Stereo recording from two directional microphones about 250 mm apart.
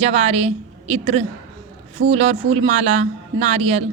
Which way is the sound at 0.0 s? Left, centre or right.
Right.